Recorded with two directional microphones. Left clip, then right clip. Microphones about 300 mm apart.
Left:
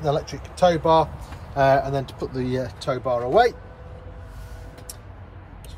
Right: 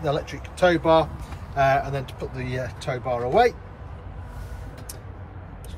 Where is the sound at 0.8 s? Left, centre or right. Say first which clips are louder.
Left 1 dB; centre.